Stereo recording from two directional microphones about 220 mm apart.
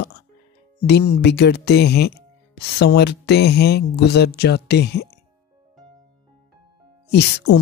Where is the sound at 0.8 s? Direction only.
50° left (ahead or behind).